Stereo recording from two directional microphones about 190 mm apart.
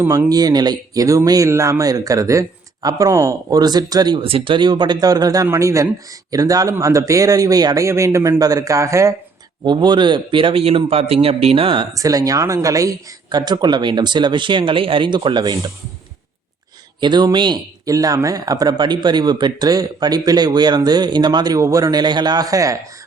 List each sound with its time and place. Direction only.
0.0 s a man's voice: 15° right (ahead or behind)
17.0 s a man's voice: 25° right (ahead or behind)